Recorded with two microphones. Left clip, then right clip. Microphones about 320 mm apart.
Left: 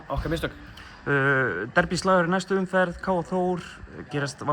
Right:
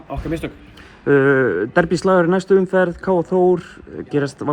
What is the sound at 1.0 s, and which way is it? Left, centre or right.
A man's voice, centre.